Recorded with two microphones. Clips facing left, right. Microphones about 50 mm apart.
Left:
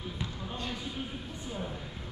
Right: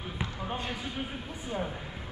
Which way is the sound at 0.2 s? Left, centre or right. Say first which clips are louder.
Right 5 dB; right.